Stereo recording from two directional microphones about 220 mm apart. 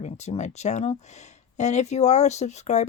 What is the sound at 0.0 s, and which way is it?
Speech, 30° left (ahead or behind).